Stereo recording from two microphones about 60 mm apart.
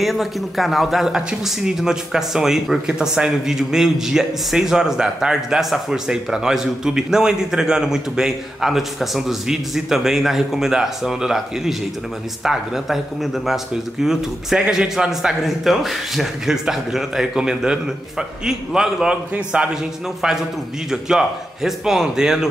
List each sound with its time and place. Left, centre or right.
0.0 s a man's voice: centre
19.3 s a man's voice: right
19.7 s speech: centre